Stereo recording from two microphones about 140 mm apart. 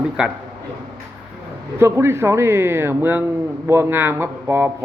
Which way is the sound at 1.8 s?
20° right (ahead or behind).